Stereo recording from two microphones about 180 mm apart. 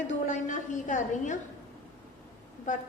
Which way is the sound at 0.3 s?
45° left (ahead or behind).